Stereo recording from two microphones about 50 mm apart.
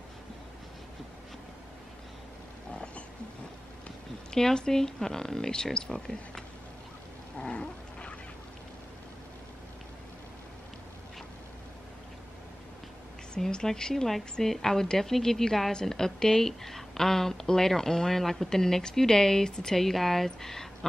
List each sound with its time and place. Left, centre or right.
4.3 s a woman's voice: centre
7.3 s cat: centre
13.3 s a woman's voice: centre